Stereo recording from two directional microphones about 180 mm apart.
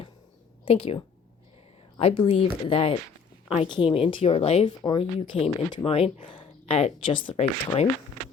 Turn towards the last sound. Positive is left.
turn(degrees=30)  # may be behind; listen again after turning